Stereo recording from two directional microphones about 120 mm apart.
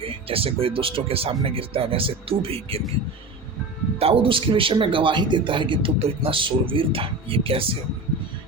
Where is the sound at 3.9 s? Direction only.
55° right (ahead or behind).